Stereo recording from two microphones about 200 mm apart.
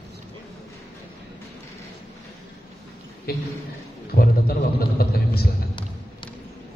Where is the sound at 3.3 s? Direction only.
50° left (ahead or behind).